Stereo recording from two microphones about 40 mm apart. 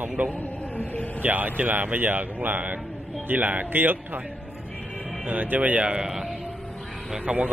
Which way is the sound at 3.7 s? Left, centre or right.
Right.